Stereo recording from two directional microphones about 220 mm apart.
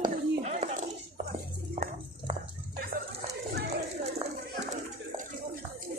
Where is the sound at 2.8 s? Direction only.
40° right (ahead or behind).